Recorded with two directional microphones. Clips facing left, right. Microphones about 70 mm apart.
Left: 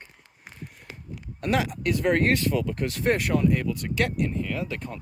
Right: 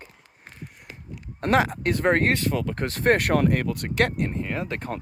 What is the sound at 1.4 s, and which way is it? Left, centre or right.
Speech, right.